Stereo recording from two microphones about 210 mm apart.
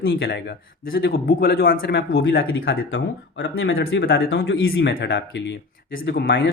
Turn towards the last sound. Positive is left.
turn(degrees=50)  # may be behind; listen again after turning